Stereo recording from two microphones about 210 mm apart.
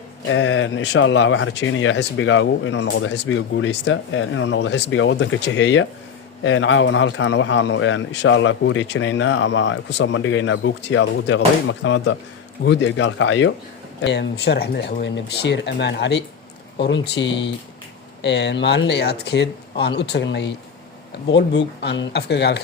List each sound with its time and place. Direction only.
0.3 s a man's voice: 65° left (ahead or behind)
2.8 s a man's voice: 55° left (ahead or behind)